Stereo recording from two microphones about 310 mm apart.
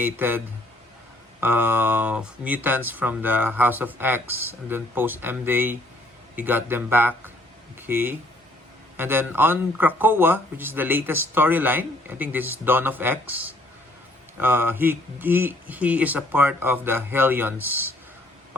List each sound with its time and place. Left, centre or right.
0.0 s speech: centre